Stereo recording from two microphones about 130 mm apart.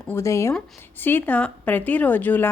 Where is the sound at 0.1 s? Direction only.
20° left (ahead or behind).